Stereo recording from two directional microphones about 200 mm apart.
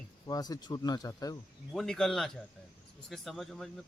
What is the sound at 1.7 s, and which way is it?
Speech, centre (ahead or behind).